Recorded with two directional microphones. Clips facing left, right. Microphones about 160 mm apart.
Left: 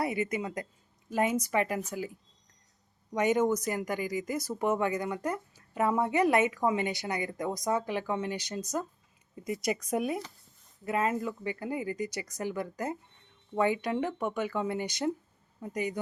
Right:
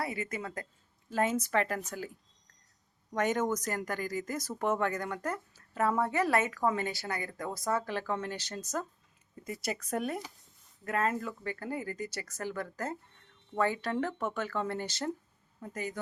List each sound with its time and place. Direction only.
0.0 s speech: 20° left (ahead or behind)
3.2 s speech: 10° left (ahead or behind)